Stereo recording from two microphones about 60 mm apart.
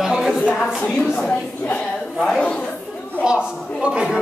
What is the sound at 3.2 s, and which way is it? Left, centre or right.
Speech, centre.